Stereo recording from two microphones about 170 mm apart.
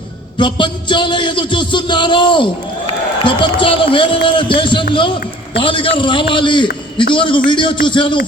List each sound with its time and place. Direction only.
0.3 s a man's voice: 30° left (ahead or behind)